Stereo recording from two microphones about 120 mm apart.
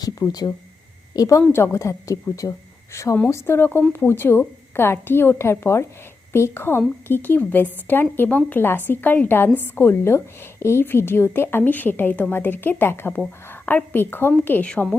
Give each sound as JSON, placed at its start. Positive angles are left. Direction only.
{"t": 0.0, "sound": "a woman's voice", "side_deg": 35}